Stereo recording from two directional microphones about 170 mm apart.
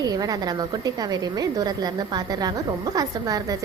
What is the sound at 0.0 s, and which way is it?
A woman's voice, 20° right (ahead or behind).